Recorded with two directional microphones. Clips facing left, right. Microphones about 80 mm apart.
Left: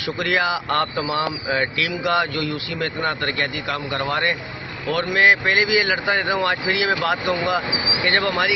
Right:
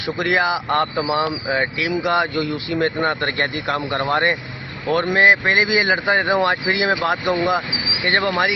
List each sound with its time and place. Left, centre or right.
0.0 s speech: right